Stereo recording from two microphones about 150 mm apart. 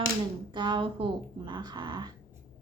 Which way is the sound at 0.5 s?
30° right (ahead or behind).